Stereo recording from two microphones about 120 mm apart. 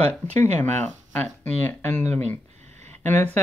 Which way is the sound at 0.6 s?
15° left (ahead or behind).